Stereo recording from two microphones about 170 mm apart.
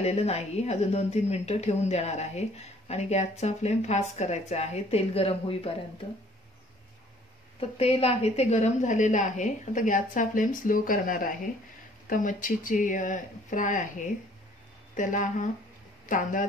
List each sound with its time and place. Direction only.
0.0 s speech: 40° left (ahead or behind)
7.7 s a woman's voice: 35° left (ahead or behind)